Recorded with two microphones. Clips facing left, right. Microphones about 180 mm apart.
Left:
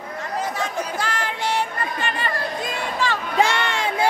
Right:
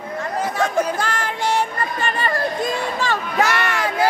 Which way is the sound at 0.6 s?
50° right (ahead or behind).